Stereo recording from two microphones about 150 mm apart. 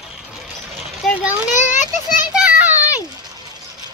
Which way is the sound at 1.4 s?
55° left (ahead or behind).